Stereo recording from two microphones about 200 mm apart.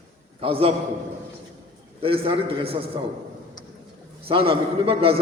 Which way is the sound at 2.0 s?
25° right (ahead or behind).